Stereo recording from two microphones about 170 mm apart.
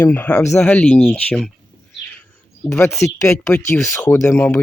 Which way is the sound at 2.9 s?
15° left (ahead or behind).